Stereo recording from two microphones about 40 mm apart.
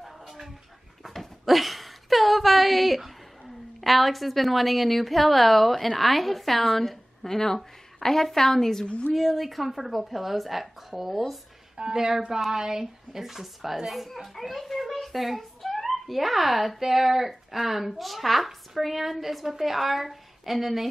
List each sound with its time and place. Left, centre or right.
1.0 s dog: centre
1.4 s a sound: centre
3.8 s a woman's voice: centre
8.8 s a woman's voice: left
9.1 s speech: centre
11.7 s a woman's voice: right; by 20.9 s centre